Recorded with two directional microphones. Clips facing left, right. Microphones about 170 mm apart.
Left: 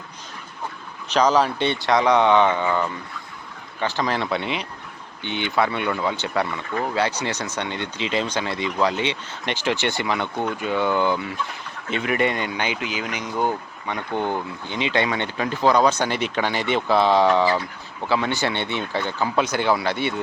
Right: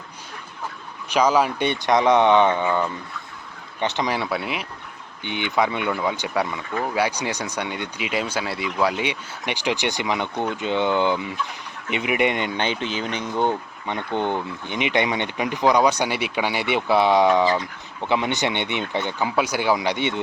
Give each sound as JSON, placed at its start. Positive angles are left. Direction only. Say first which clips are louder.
{"t": 1.1, "sound": "speech", "louder": "even", "side_deg": -10}
{"t": 5.2, "sound": "speech", "louder": "even", "side_deg": -15}
{"t": 12.6, "sound": "speech", "louder": "right 2 dB", "side_deg": 10}
{"t": 14.2, "sound": "speech", "louder": "right 1 dB", "side_deg": -25}